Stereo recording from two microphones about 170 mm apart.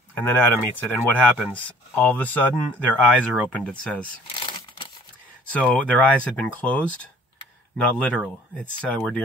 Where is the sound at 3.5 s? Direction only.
10° left (ahead or behind).